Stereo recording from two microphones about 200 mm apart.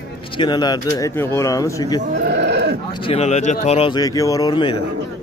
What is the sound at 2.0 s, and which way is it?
Sheep, 50° right (ahead or behind).